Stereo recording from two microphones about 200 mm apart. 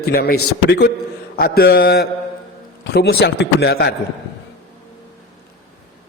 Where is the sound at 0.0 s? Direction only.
50° left (ahead or behind).